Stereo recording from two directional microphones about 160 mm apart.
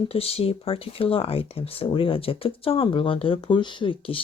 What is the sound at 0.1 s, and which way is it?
Speech, 35° left (ahead or behind).